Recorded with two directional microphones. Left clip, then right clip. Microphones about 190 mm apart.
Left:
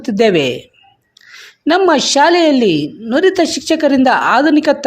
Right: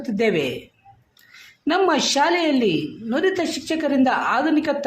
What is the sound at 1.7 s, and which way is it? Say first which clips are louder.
A woman's voice: left 8 dB; 40° left (ahead or behind).